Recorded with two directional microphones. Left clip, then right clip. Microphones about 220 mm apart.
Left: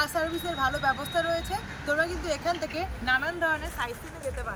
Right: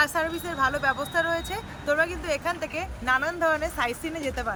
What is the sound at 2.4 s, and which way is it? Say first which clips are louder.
Speech: even; 10° right (ahead or behind).